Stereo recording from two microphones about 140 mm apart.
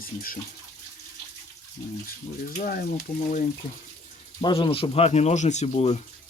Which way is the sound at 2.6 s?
90° left.